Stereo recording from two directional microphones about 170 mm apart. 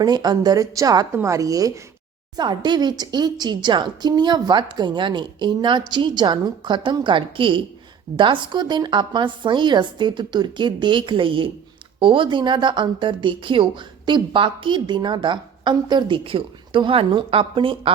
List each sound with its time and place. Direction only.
0.0 s speech: 25° right (ahead or behind)